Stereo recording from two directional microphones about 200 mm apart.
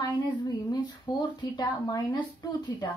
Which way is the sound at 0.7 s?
20° left (ahead or behind).